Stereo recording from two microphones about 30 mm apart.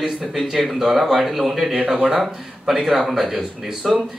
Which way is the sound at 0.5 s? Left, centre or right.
Centre.